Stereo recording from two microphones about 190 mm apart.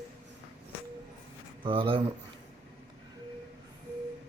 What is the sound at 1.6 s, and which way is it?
Speech, 25° right (ahead or behind).